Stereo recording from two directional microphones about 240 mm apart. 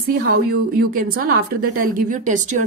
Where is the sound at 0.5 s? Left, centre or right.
Right.